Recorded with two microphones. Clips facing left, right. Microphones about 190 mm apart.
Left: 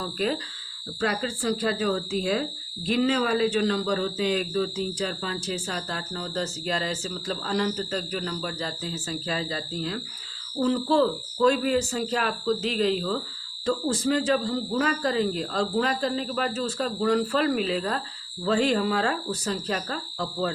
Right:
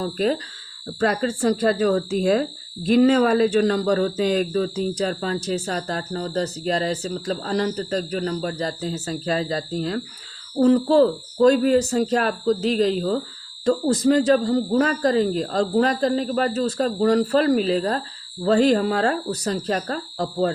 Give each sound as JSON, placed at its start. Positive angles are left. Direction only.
{"t": 0.0, "sound": "speech", "side_deg": -40}